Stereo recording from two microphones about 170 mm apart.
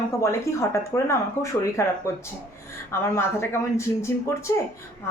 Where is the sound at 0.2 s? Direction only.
15° left (ahead or behind).